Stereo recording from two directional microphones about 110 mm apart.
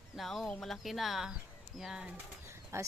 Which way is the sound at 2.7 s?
25° right (ahead or behind).